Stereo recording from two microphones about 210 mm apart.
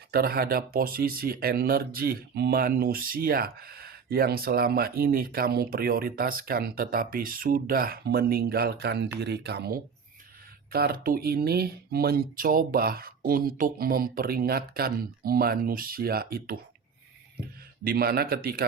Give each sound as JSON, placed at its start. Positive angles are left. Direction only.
{"t": 0.1, "sound": "speech", "side_deg": -45}